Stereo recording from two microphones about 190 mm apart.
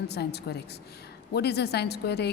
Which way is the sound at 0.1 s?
60° left (ahead or behind).